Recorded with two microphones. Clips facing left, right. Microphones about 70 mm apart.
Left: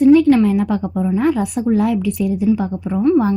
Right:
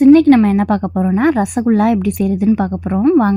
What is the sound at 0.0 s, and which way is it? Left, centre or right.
A woman's voice, right.